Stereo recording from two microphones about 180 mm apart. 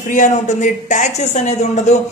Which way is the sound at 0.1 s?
45° left (ahead or behind).